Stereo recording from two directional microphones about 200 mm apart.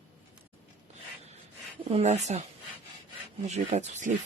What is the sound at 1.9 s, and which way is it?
Speech, 30° right (ahead or behind).